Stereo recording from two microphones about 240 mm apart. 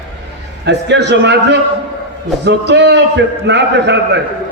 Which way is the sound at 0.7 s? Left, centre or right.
Right.